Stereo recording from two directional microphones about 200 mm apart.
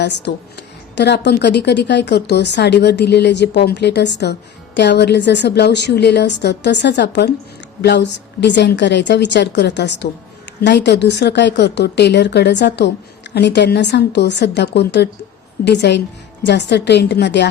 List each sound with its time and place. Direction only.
0.0 s speech: 60° left (ahead or behind)